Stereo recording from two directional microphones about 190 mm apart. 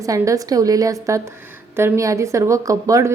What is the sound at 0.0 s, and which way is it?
A woman's voice, 15° right (ahead or behind).